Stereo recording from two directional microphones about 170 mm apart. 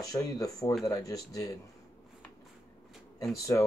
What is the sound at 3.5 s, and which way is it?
Speech, 15° left (ahead or behind).